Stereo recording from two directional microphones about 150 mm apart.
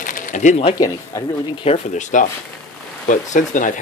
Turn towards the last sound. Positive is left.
turn(degrees=60)  # may be behind; listen again after turning